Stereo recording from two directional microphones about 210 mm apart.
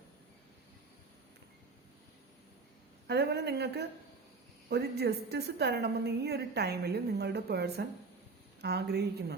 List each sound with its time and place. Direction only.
3.1 s a woman's voice: 50° right (ahead or behind)